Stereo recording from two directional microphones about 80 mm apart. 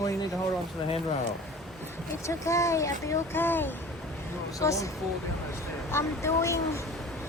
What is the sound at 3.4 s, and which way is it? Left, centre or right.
Speech, left.